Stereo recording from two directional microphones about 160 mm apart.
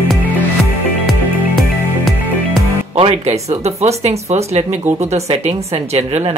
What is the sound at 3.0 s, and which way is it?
Speech, 40° right (ahead or behind).